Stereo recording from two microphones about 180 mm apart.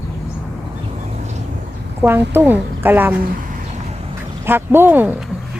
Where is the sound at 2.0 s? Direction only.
10° right (ahead or behind).